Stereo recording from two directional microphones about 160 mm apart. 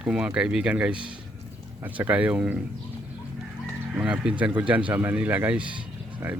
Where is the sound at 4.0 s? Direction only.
5° right (ahead or behind).